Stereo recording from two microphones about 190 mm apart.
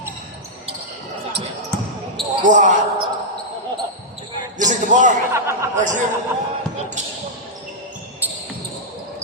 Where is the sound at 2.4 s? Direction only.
40° right (ahead or behind).